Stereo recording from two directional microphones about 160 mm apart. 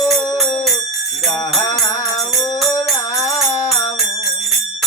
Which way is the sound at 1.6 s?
20° left (ahead or behind).